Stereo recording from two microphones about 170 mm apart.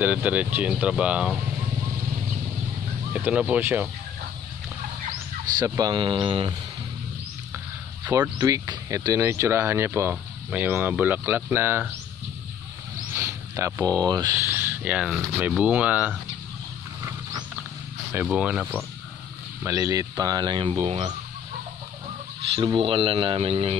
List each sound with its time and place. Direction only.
0.0 s speech: 10° right (ahead or behind)
3.1 s speech: 10° right (ahead or behind)
5.6 s speech: 20° right (ahead or behind)
7.5 s speech: 15° right (ahead or behind)
13.1 s a sound: 20° right (ahead or behind)
14.0 s speech: 20° right (ahead or behind)
18.1 s speech: 5° right (ahead or behind)
19.6 s speech: 20° right (ahead or behind)
22.5 s speech: 30° right (ahead or behind)